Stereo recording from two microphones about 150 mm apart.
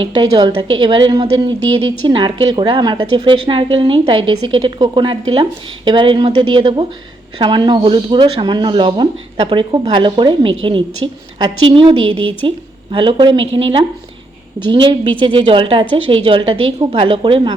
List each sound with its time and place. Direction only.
0.0 s a woman's voice: 30° right (ahead or behind)